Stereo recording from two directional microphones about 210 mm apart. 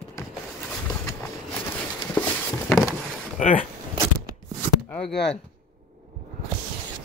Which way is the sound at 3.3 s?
40° left (ahead or behind).